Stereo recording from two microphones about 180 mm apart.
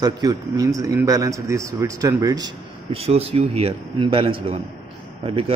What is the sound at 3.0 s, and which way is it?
A man's voice, 35° right (ahead or behind).